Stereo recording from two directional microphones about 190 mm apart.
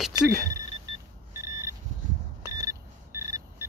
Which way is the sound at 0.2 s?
5° left (ahead or behind).